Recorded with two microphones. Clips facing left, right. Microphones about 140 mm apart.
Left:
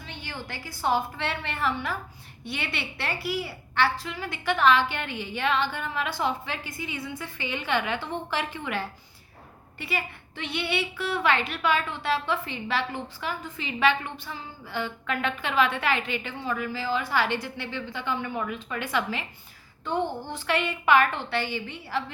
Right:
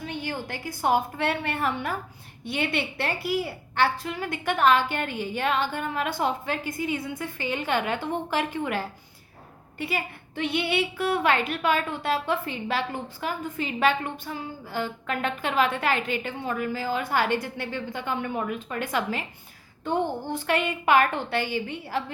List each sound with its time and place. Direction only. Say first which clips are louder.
0.0 s a woman's voice: right 7 dB; 50° right (ahead or behind)